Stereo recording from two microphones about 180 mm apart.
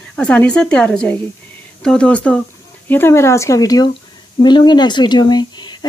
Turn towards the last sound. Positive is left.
turn(degrees=25)  # may be behind; listen again after turning